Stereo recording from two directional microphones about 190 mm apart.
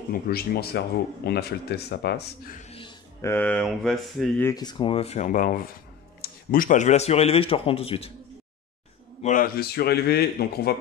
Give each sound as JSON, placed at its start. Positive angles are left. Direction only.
{"t": 0.1, "sound": "speech", "side_deg": 55}
{"t": 2.6, "sound": "a sound", "side_deg": 30}
{"t": 3.2, "sound": "speech", "side_deg": 10}
{"t": 4.5, "sound": "a man's voice", "side_deg": 20}
{"t": 9.2, "sound": "speech", "side_deg": 45}